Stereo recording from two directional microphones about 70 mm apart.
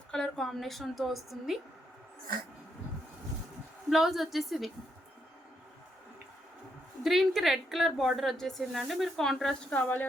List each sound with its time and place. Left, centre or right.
0.1 s a woman's voice: centre
3.8 s a woman's voice: centre
7.0 s a woman's voice: centre
9.6 s speech: left